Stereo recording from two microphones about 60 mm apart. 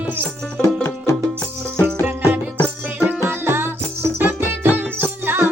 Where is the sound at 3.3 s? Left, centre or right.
Right.